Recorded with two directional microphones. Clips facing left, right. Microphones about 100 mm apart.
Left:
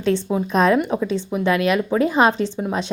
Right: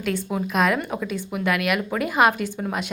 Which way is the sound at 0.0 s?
25° left (ahead or behind).